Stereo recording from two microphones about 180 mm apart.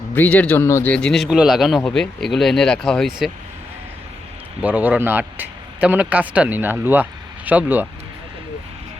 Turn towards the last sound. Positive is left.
turn(degrees=-10)  # may be behind; listen again after turning